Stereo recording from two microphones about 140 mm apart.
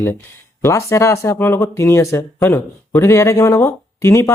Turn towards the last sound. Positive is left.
turn(degrees=20)  # may be behind; listen again after turning